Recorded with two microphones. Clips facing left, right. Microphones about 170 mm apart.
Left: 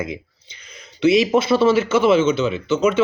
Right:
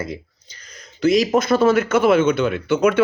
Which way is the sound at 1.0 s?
45° right (ahead or behind).